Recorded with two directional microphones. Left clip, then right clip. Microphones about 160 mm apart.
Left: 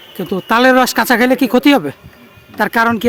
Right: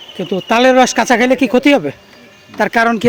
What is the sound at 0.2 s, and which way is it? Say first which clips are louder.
Speech: even; 15° left (ahead or behind).